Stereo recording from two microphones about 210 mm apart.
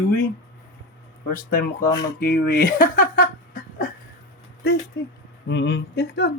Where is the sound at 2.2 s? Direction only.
45° left (ahead or behind).